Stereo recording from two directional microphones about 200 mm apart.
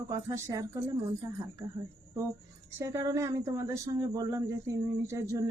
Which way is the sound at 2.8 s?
15° right (ahead or behind).